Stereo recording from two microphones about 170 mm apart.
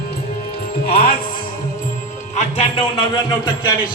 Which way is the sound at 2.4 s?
35° left (ahead or behind).